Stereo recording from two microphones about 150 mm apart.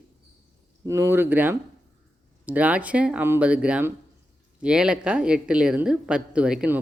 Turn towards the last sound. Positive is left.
turn(degrees=-5)  # may be behind; listen again after turning